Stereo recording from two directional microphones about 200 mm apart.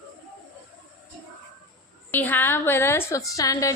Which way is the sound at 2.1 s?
10° left (ahead or behind).